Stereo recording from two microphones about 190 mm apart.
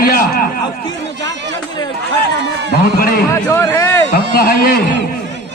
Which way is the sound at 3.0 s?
50° left (ahead or behind).